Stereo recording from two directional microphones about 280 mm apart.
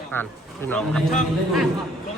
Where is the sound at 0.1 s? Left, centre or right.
Centre.